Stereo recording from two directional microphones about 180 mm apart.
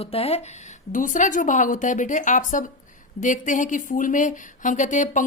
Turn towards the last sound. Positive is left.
turn(degrees=45)  # may be behind; listen again after turning